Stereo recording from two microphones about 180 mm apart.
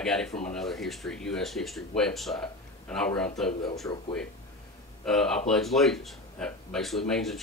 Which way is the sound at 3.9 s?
15° left (ahead or behind).